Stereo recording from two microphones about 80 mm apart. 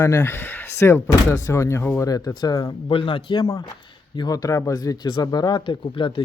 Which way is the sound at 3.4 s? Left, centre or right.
Left.